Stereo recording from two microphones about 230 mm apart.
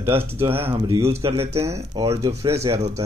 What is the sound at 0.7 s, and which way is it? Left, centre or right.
Speech, right.